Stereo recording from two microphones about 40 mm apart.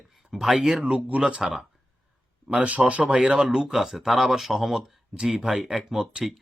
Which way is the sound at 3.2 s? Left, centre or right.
Centre.